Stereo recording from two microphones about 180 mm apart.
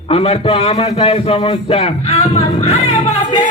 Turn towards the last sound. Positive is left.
turn(degrees=35)  # may be behind; listen again after turning